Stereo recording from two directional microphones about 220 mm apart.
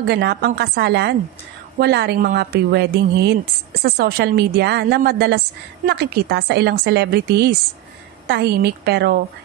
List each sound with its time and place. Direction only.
0.0 s speech: 50° right (ahead or behind)